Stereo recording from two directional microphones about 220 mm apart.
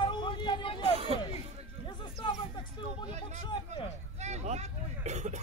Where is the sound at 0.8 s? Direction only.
25° right (ahead or behind).